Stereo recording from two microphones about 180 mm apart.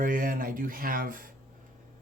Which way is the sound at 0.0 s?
50° right (ahead or behind).